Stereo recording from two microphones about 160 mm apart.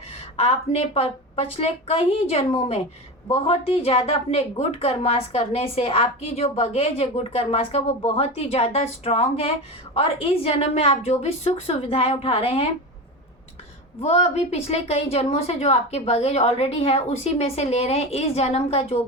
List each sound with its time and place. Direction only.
0.3 s a woman's voice: 40° left (ahead or behind)
14.0 s a woman's voice: 40° left (ahead or behind)